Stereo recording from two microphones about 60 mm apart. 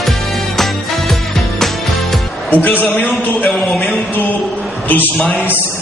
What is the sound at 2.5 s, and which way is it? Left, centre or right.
A man's voice, left.